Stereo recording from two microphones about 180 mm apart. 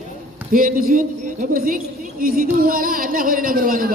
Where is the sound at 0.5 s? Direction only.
50° right (ahead or behind).